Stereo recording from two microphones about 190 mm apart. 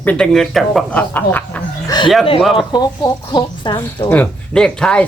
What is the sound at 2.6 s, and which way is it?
Speech, 20° left (ahead or behind).